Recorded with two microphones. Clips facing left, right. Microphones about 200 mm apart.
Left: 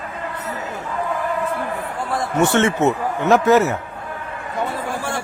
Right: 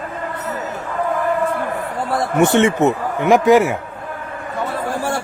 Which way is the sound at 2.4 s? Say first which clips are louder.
Right 3 dB; 15° right (ahead or behind).